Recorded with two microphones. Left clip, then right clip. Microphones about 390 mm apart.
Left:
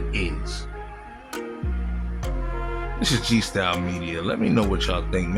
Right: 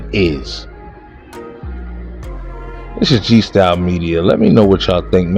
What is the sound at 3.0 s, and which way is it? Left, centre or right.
Speech, left.